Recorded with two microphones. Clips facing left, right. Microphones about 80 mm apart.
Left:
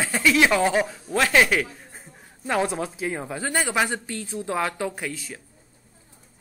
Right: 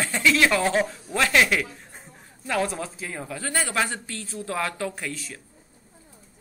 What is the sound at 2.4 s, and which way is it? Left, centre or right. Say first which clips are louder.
A woman's voice: left 2 dB; centre.